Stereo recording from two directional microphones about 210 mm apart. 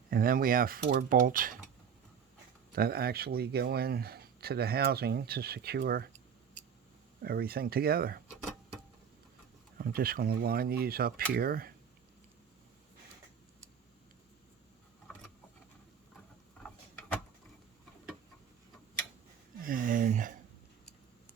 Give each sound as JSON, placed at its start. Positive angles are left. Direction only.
{"t": 0.1, "sound": "speech", "side_deg": -45}
{"t": 2.7, "sound": "speech", "side_deg": -45}
{"t": 7.2, "sound": "speech", "side_deg": -45}
{"t": 9.7, "sound": "speech", "side_deg": -45}
{"t": 16.6, "sound": "a sound", "side_deg": 5}
{"t": 19.6, "sound": "a sound", "side_deg": -40}